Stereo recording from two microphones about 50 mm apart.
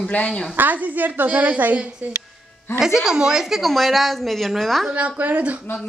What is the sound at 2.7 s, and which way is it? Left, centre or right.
A woman's voice, centre.